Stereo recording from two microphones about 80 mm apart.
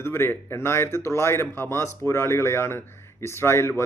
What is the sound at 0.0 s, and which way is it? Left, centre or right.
Speech, left.